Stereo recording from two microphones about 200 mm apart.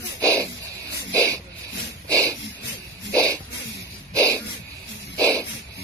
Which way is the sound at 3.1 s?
15° right (ahead or behind).